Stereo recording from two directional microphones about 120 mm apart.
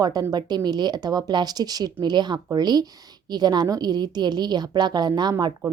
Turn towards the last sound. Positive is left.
turn(degrees=-35)  # may be behind; listen again after turning